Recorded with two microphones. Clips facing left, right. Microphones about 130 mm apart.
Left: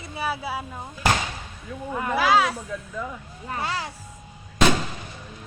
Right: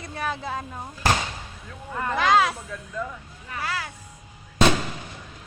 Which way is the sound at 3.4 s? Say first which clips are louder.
Left 2 dB; 30° left (ahead or behind).